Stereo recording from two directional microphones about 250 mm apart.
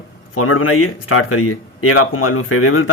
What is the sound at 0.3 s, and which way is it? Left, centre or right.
Speech, left.